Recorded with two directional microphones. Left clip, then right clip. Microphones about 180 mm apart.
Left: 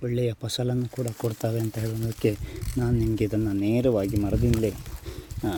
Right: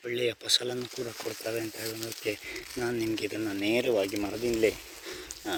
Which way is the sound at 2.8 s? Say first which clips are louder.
Left 4 dB; 10° left (ahead or behind).